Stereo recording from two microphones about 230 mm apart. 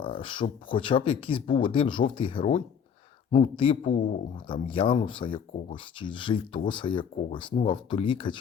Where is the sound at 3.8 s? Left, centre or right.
Left.